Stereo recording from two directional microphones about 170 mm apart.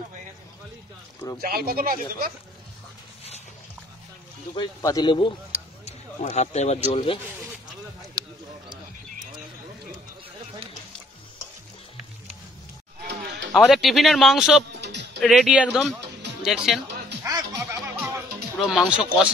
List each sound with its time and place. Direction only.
1.4 s speech: 65° right (ahead or behind)
4.6 s speech: 25° left (ahead or behind)
5.9 s speech: 40° left (ahead or behind)
6.9 s speech: 30° left (ahead or behind)
8.1 s a sound: 20° right (ahead or behind)
13.0 s a sound: 90° right
13.7 s speech: centre (ahead or behind)
14.8 s music: 90° right
15.1 s speech: centre (ahead or behind)
17.2 s music: 15° right (ahead or behind)
18.6 s speech: 5° right (ahead or behind)